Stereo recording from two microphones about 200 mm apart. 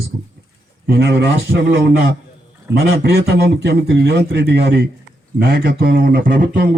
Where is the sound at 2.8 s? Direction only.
50° right (ahead or behind).